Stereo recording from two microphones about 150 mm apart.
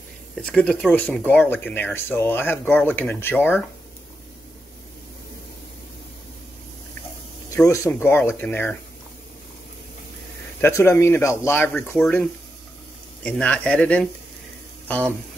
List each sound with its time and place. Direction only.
0.4 s speech: 5° left (ahead or behind)
7.5 s speech: 20° left (ahead or behind)
10.6 s speech: 15° left (ahead or behind)